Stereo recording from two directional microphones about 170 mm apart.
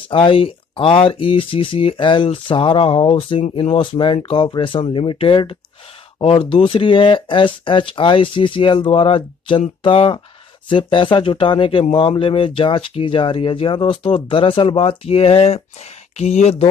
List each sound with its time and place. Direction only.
0.1 s speech: 30° left (ahead or behind)